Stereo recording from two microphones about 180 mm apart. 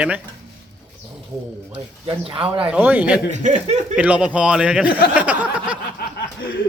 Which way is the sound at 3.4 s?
40° right (ahead or behind).